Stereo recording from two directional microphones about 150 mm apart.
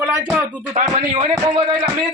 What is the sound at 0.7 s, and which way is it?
Speech, 50° right (ahead or behind).